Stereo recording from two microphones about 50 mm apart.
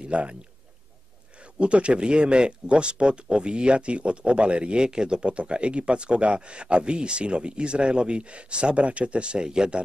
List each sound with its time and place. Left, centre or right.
0.0 s a man's voice: right
1.4 s speech: right